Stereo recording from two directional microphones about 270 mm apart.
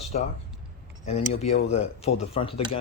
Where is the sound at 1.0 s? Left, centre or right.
Left.